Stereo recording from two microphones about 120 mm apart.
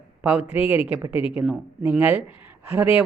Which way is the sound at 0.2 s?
10° right (ahead or behind).